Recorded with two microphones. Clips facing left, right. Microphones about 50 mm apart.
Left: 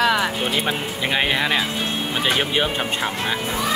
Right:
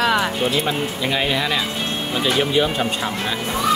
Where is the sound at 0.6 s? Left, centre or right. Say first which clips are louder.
Right 1 dB; left.